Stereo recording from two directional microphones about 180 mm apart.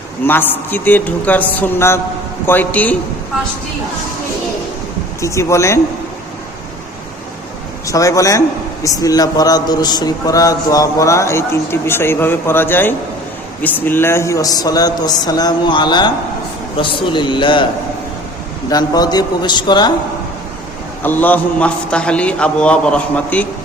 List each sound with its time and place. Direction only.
0.3 s a man's voice: 10° left (ahead or behind)
5.2 s a man's voice: 15° left (ahead or behind)
7.9 s a man's voice: 20° left (ahead or behind)
18.7 s a man's voice: 20° left (ahead or behind)
21.0 s a man's voice: 10° left (ahead or behind)